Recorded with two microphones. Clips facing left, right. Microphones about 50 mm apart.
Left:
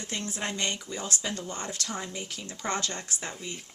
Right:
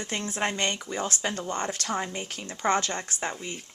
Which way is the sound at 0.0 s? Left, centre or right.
Right.